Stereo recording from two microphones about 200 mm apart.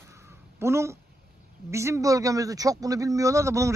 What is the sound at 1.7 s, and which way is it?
A man's voice, 15° right (ahead or behind).